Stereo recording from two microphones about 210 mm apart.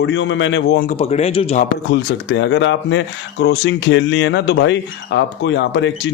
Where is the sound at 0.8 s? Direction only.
35° left (ahead or behind).